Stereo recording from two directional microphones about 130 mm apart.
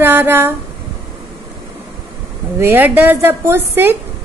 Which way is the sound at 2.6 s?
15° right (ahead or behind).